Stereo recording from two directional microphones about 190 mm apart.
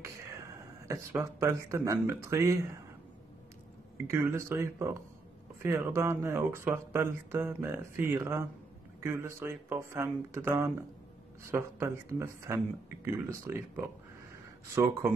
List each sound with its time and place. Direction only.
0.0 s a sound: 15° right (ahead or behind)
2.2 s speech: 15° right (ahead or behind)
4.1 s speech: 15° right (ahead or behind)